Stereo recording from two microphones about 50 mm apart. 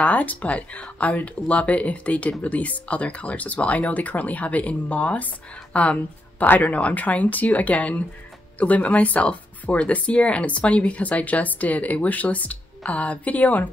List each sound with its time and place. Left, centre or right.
0.0 s speech: left